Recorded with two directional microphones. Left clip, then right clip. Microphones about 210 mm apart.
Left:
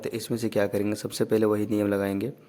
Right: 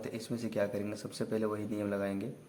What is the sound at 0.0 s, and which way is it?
Speech, 50° left (ahead or behind).